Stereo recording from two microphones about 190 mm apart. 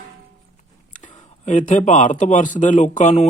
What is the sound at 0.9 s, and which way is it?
Speech, 40° left (ahead or behind).